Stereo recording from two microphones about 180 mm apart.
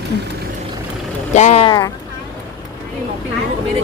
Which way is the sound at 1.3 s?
40° left (ahead or behind).